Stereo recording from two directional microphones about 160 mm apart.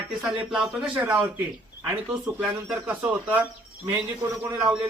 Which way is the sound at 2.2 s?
5° right (ahead or behind).